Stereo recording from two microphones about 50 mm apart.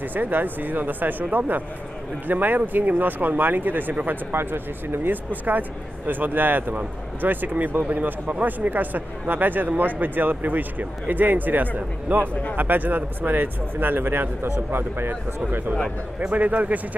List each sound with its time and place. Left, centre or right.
0.1 s speech: right
16.2 s speech: right